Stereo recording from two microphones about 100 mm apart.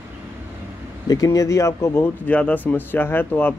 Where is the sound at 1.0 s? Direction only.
40° left (ahead or behind); by 3.5 s 20° left (ahead or behind).